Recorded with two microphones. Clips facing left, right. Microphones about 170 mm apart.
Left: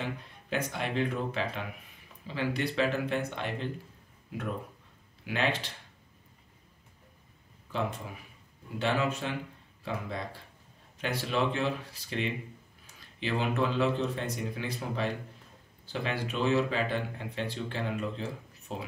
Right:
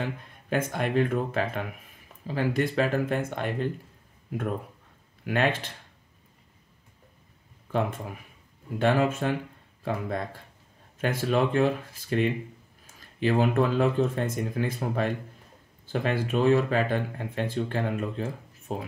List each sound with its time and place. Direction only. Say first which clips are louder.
0.5 s speech: right 5 dB; 50° right (ahead or behind)
5.2 s speech: right 5 dB; 50° right (ahead or behind)
8.7 s speech: right 6 dB; 50° right (ahead or behind)